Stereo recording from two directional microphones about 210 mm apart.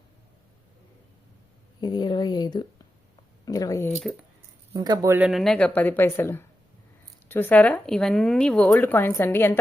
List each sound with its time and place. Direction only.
1.8 s speech: 20° left (ahead or behind)
4.7 s a woman's voice: 15° right (ahead or behind); by 9.6 s 10° left (ahead or behind)